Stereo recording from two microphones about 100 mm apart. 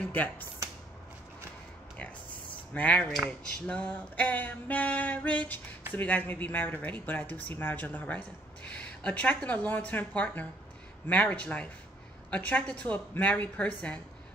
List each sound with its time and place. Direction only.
0.0 s speech: 15° left (ahead or behind)
2.7 s speech: 15° left (ahead or behind)